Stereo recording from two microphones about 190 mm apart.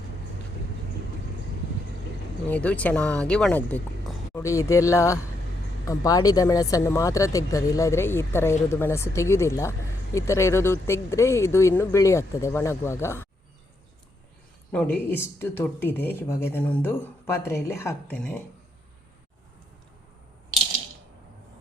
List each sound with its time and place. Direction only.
2.5 s speech: 5° left (ahead or behind)
14.7 s speech: 5° left (ahead or behind)